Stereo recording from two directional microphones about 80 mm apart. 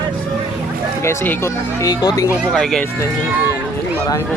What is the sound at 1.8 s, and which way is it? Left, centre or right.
Speech, left.